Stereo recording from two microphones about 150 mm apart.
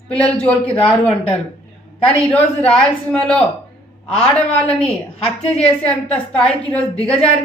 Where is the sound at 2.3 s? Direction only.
5° left (ahead or behind).